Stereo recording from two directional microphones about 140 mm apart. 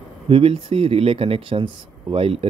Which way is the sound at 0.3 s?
40° right (ahead or behind).